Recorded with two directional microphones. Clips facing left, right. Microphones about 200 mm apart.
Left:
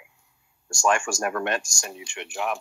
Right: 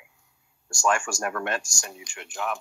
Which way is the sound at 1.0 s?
10° left (ahead or behind).